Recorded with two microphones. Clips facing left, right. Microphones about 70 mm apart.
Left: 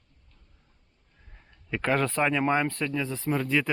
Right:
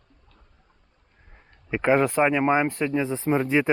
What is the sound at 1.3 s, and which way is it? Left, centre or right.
Speech, right.